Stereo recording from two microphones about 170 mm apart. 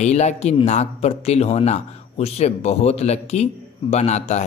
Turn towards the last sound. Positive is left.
turn(degrees=40)  # may be behind; listen again after turning